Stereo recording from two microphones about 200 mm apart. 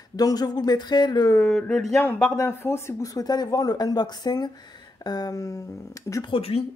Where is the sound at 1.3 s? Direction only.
5° left (ahead or behind).